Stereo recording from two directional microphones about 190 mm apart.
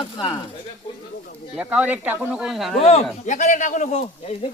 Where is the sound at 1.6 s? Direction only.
10° right (ahead or behind).